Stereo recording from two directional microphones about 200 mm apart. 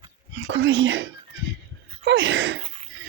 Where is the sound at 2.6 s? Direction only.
30° right (ahead or behind).